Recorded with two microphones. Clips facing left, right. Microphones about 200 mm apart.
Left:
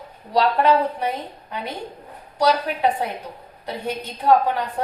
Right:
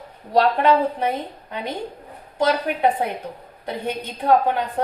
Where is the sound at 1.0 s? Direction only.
55° right (ahead or behind).